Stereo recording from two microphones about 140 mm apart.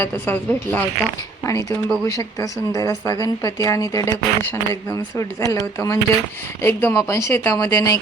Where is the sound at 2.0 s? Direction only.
25° left (ahead or behind).